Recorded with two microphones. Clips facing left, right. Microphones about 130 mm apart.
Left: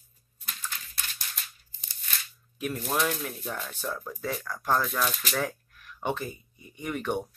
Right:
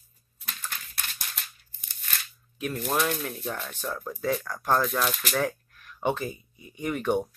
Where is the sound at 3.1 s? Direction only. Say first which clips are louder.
Right 2 dB; centre (ahead or behind).